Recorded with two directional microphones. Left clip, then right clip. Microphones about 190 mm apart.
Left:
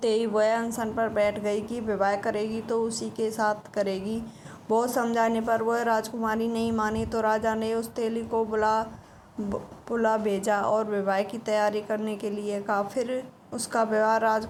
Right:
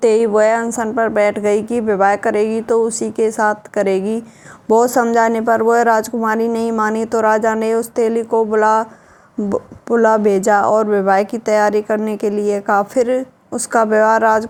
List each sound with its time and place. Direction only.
0.0 s a woman's voice: 45° right (ahead or behind)
3.8 s a woman's voice: 90° right
4.7 s a woman's voice: 45° right (ahead or behind)